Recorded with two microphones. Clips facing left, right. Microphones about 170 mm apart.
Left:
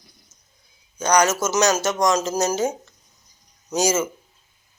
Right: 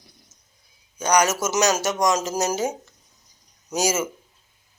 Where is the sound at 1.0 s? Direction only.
10° right (ahead or behind).